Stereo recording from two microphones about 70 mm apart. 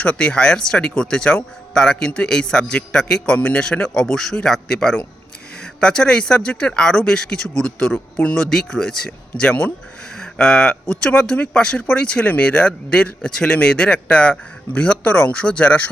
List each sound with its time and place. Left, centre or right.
0.0 s speech: centre
3.3 s speech: centre